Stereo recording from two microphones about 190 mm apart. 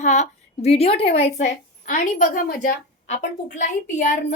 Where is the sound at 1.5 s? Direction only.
40° left (ahead or behind).